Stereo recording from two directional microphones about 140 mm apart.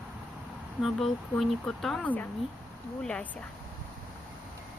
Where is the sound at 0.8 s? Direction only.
Centre (ahead or behind).